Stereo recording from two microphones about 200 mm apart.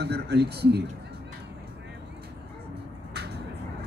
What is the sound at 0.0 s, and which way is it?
Speech, 55° right (ahead or behind).